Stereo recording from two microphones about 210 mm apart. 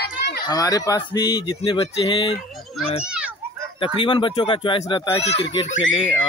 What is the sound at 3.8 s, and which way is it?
Speech, 25° left (ahead or behind).